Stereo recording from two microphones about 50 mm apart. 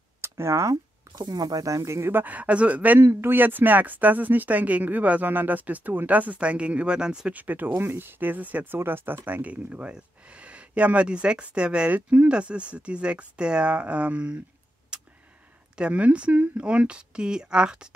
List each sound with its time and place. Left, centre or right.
0.2 s a sound: right
1.7 s speech: right
2.1 s speech: right
3.0 s speech: right; by 7.3 s centre
7.3 s speech: right
7.7 s speech: right
8.7 s speech: right
9.5 s speech: right
11.9 s speech: right
12.3 s speech: right
14.9 s a sound: centre
15.7 s speech: right